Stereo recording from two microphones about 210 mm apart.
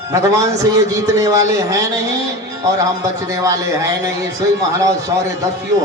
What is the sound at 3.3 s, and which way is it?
A man's voice, 15° right (ahead or behind).